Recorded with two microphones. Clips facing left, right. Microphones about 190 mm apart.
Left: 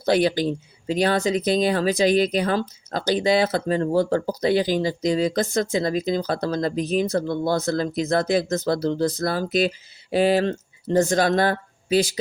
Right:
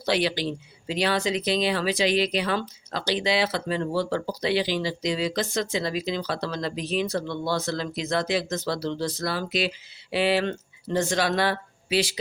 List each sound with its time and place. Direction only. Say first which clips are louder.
0.0 s speech: left 5 dB; 45° left (ahead or behind)